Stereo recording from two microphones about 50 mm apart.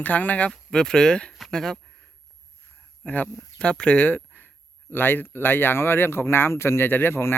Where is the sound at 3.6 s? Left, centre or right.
Left.